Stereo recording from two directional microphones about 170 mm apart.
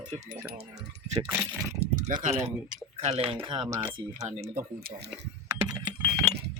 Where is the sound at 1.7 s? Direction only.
50° right (ahead or behind).